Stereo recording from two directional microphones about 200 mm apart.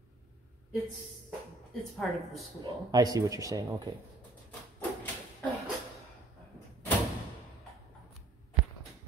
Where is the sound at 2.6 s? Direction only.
20° right (ahead or behind).